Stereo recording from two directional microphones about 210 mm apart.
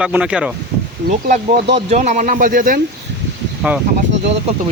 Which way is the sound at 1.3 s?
35° right (ahead or behind).